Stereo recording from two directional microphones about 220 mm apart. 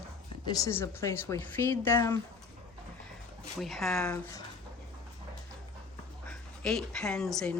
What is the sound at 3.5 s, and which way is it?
Speech, centre (ahead or behind).